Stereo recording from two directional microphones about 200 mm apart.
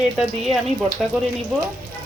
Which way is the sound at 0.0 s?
Centre (ahead or behind).